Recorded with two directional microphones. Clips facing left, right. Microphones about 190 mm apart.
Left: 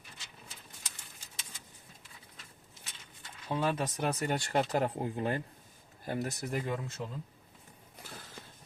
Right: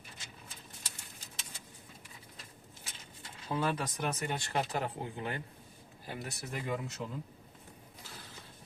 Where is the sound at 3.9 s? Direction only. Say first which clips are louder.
Left 4 dB; 35° left (ahead or behind).